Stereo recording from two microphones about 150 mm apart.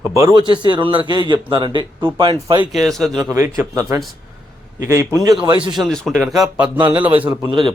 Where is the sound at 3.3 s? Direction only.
20° right (ahead or behind).